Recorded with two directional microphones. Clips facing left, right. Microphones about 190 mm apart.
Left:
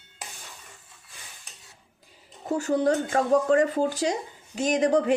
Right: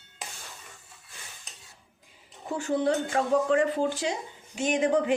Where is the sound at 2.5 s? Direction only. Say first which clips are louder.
Left 3 dB; 40° left (ahead or behind).